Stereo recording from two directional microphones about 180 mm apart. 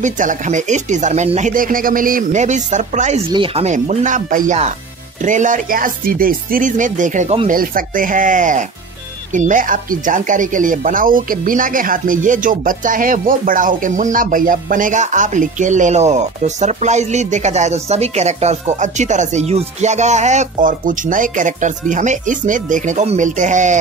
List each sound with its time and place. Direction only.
0.0 s speech: 45° right (ahead or behind)
3.3 s speech: 30° right (ahead or behind)